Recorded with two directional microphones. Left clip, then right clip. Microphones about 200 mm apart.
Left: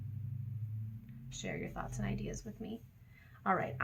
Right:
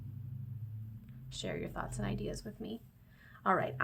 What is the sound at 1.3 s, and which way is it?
Speech, 35° right (ahead or behind).